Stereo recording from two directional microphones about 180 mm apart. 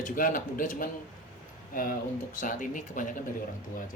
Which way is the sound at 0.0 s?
50° left (ahead or behind).